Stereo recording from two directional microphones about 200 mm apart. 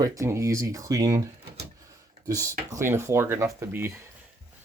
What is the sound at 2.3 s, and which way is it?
Speech, 15° right (ahead or behind).